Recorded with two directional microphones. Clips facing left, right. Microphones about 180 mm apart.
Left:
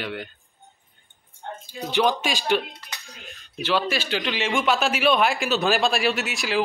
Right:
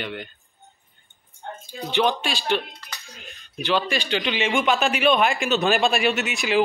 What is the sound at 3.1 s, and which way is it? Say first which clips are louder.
Cutlery: even; centre (ahead or behind).